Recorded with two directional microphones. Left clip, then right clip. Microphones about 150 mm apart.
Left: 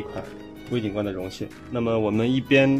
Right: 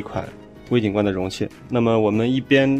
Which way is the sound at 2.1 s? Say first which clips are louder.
Right 2 dB; 15° right (ahead or behind).